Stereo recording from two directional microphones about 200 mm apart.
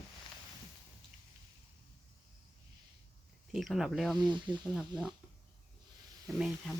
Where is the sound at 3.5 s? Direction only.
Centre (ahead or behind).